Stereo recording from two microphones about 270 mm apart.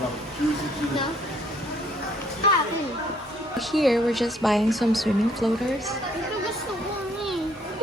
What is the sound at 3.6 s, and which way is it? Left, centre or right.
Speech, centre.